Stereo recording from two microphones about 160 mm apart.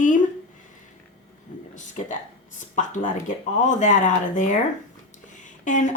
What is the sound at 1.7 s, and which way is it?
A woman's voice, 50° left (ahead or behind).